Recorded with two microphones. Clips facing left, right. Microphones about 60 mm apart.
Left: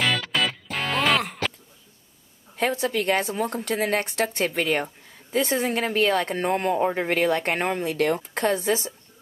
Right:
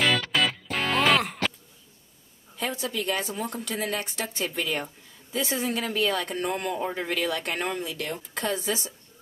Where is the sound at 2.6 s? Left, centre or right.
Left.